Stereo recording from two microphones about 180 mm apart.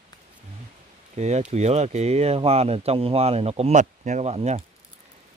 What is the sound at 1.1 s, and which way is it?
Speech, 40° right (ahead or behind).